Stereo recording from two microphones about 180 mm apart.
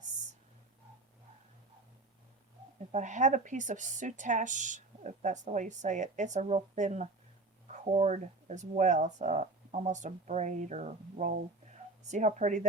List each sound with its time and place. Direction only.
2.9 s a woman's voice: 45° right (ahead or behind)